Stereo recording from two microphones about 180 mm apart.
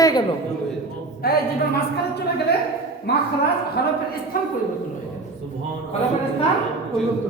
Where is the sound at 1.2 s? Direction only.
60° left (ahead or behind).